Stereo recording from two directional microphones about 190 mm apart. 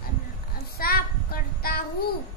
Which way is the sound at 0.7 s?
50° left (ahead or behind).